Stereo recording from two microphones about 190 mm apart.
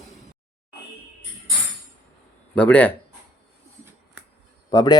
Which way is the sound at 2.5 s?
10° left (ahead or behind).